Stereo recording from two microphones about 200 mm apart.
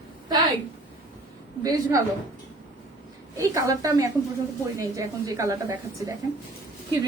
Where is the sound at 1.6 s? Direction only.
15° right (ahead or behind).